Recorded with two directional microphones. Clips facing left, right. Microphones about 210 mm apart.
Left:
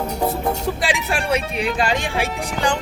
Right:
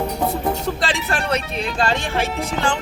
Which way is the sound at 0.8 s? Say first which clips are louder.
Even; 10° left (ahead or behind).